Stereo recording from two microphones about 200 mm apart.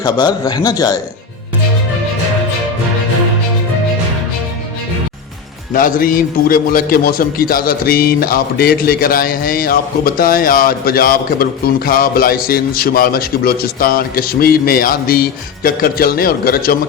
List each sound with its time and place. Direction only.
0.0 s a man's voice: 20° left (ahead or behind)
5.7 s a man's voice: 45° left (ahead or behind)